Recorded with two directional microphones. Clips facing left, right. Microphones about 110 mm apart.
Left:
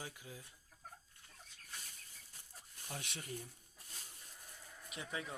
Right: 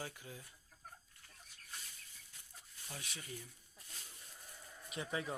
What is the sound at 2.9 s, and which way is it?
Speech, 65° left (ahead or behind).